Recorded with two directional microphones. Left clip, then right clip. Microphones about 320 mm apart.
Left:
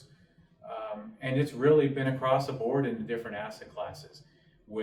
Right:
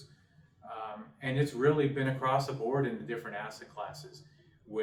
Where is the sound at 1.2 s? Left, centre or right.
Centre.